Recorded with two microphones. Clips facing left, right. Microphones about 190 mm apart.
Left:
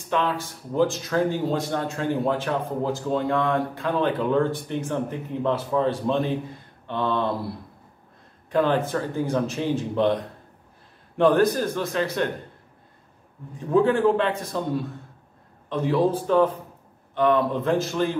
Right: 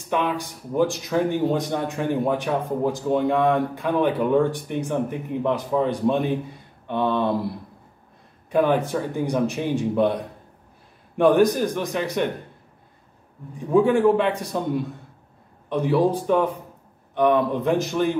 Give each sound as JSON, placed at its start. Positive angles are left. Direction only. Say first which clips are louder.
{"t": 0.1, "sound": "speech", "louder": "right 1 dB", "side_deg": -15}
{"t": 8.5, "sound": "speech", "louder": "right 2 dB", "side_deg": -15}
{"t": 11.1, "sound": "speech", "louder": "right 2 dB", "side_deg": -15}
{"t": 13.7, "sound": "speech", "louder": "right 2 dB", "side_deg": -10}
{"t": 15.7, "sound": "speech", "louder": "right 2 dB", "side_deg": -15}